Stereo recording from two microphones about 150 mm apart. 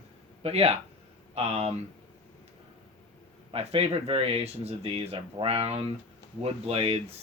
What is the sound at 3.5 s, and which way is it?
Speech, 40° right (ahead or behind).